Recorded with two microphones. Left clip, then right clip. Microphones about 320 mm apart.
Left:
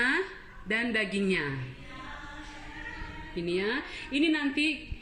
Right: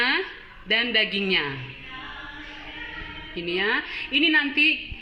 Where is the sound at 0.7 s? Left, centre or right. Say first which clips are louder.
Right 7 dB; centre.